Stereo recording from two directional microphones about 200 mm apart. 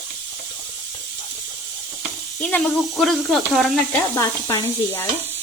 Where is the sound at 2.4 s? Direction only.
5° left (ahead or behind).